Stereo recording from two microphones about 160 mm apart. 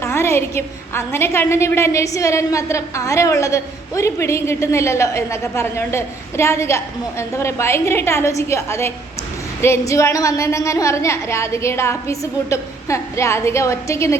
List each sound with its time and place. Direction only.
0.0 s a woman's voice: 15° left (ahead or behind)